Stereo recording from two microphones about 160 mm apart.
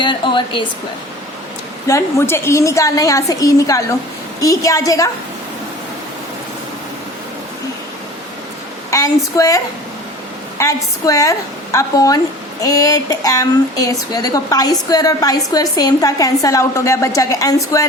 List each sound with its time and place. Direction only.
0.0 s a sound: 30° left (ahead or behind)
1.9 s speech: 15° left (ahead or behind)
8.9 s a woman's voice: 20° left (ahead or behind)
10.6 s speech: 20° left (ahead or behind)